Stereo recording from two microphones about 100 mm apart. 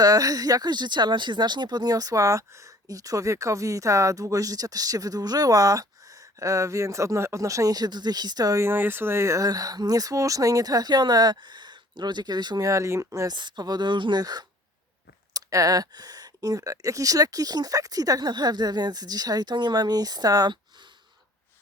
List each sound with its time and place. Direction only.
0.0 s speech: 35° right (ahead or behind)
8.6 s speech: 20° right (ahead or behind)
13.3 s speech: 45° right (ahead or behind)